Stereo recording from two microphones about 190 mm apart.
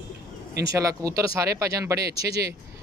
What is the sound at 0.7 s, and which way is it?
Speech, 15° right (ahead or behind).